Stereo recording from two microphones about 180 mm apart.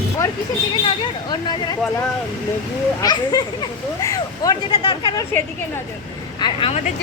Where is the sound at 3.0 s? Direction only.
20° left (ahead or behind).